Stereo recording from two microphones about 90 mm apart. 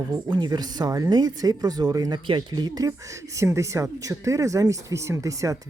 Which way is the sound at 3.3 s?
35° right (ahead or behind).